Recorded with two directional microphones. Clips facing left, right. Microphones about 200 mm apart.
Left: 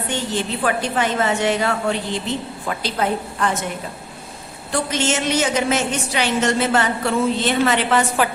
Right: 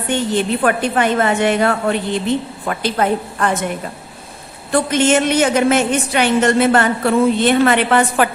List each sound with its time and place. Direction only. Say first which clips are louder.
0.1 s a woman's voice: right 8 dB; 55° right (ahead or behind)
4.7 s a woman's voice: right 7 dB; 55° right (ahead or behind)